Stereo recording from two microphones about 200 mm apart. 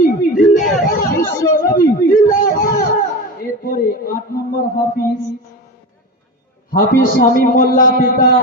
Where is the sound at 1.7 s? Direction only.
45° left (ahead or behind).